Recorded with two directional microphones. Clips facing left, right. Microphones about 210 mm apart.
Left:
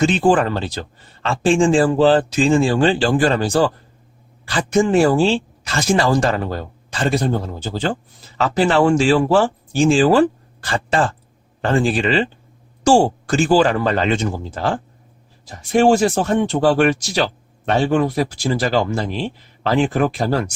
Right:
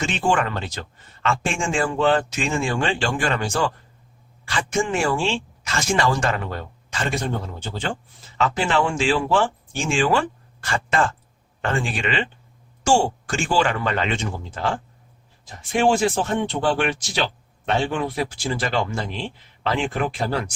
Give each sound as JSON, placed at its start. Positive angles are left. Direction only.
{"t": 0.0, "sound": "speech", "side_deg": 35}